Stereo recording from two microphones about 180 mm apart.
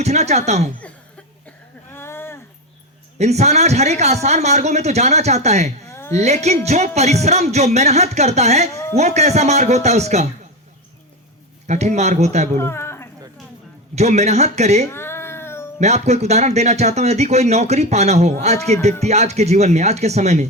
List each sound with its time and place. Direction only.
0.0 s speech: 40° right (ahead or behind)
1.9 s a sound: 15° left (ahead or behind)
3.2 s speech: 35° right (ahead or behind)
5.9 s a sound: 15° left (ahead or behind)
6.1 s speech: 40° right (ahead or behind)
8.7 s a sound: 15° left (ahead or behind)
9.0 s speech: 40° right (ahead or behind)
11.6 s speech: 40° right (ahead or behind)
12.5 s a sound: 15° left (ahead or behind)
13.9 s speech: 40° right (ahead or behind)
14.8 s cat: 15° left (ahead or behind)
15.8 s speech: 40° right (ahead or behind)